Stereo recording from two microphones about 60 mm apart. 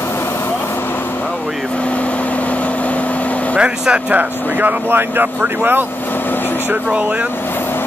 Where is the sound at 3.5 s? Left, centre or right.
Centre.